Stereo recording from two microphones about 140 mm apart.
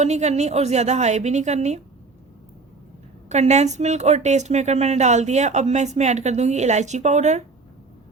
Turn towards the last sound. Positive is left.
turn(degrees=-55)  # may be behind; listen again after turning